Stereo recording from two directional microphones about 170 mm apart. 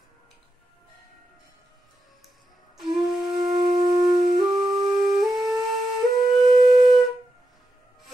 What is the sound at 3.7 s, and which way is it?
Wind instrument, 25° right (ahead or behind).